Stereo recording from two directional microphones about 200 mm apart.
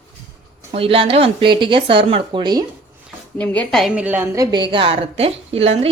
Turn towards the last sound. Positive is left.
turn(degrees=-30)  # may be behind; listen again after turning